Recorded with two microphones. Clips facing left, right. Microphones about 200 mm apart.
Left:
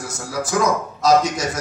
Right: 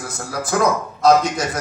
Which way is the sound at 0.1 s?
55° right (ahead or behind).